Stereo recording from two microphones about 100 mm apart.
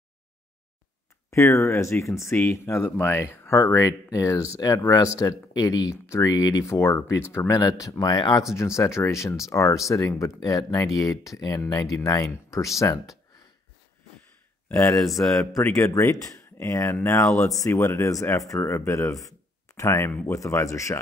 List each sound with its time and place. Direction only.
1.3 s speech: 25° left (ahead or behind)
8.5 s speech: 30° left (ahead or behind)
15.0 s speech: centre (ahead or behind)
15.9 s speech: 35° left (ahead or behind)